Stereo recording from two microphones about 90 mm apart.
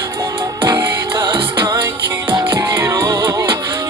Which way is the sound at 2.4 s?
35° right (ahead or behind).